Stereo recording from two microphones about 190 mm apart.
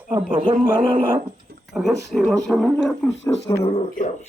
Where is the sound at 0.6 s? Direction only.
50° left (ahead or behind).